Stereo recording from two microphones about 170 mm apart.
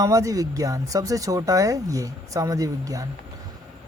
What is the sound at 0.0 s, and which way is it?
Speech, 20° right (ahead or behind).